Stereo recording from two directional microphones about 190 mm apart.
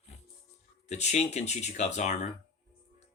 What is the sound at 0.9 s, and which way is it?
Speech, 35° left (ahead or behind).